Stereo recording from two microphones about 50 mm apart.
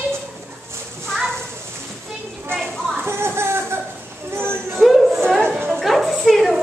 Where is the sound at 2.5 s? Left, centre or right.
Right.